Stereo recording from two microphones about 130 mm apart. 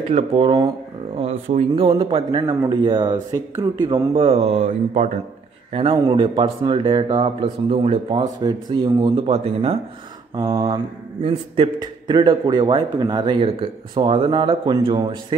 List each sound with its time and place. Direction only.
0.1 s a man's voice: 45° right (ahead or behind)
1.1 s speech: 55° right (ahead or behind)
1.9 s a man's voice: 35° right (ahead or behind); by 5.2 s 65° right (ahead or behind)
5.7 s speech: 50° right (ahead or behind)
6.0 s a man's voice: 35° right (ahead or behind)
7.7 s speech: 55° right (ahead or behind)
8.1 s a man's voice: 35° right (ahead or behind)
9.3 s a man's voice: 50° right (ahead or behind); by 15.3 s 30° right (ahead or behind)